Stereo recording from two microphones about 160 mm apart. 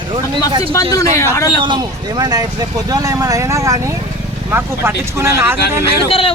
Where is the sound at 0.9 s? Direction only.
20° left (ahead or behind).